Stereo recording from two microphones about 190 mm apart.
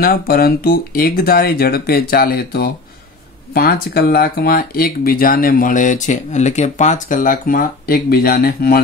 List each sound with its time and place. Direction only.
0.0 s speech: 50° left (ahead or behind)